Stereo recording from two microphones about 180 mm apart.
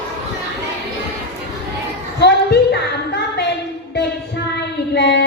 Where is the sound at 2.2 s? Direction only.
65° left (ahead or behind).